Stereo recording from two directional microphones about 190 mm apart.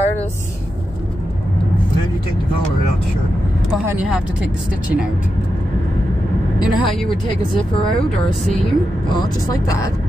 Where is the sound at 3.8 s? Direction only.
10° right (ahead or behind).